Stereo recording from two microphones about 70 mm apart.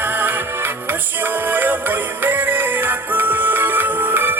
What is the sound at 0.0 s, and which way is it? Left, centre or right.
Music, right.